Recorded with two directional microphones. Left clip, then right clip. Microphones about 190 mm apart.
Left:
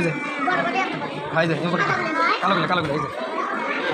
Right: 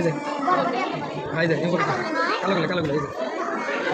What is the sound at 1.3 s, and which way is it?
Speech, centre (ahead or behind).